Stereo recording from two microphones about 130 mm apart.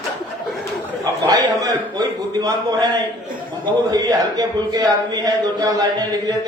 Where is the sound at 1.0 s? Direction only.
30° right (ahead or behind).